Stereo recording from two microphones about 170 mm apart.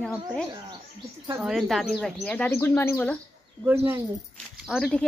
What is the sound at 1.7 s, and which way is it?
Speech, centre (ahead or behind).